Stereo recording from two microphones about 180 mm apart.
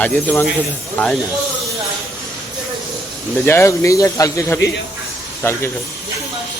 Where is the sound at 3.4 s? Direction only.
15° left (ahead or behind).